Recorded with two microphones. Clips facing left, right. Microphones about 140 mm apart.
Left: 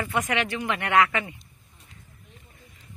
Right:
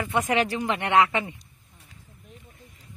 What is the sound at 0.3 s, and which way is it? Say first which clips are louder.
Speech: right 3 dB; 35° right (ahead or behind).